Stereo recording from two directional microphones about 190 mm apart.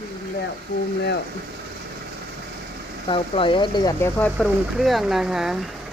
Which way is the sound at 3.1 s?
25° left (ahead or behind).